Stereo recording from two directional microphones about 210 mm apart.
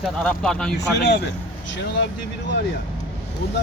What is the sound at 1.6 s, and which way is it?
Speech, 55° left (ahead or behind).